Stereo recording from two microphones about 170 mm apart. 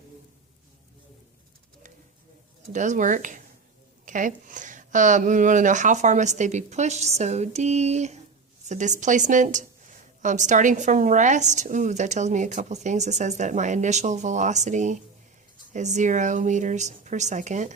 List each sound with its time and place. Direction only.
2.7 s a woman's voice: 45° right (ahead or behind)